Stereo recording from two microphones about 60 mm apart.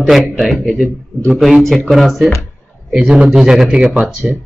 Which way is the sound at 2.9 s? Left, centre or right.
Centre.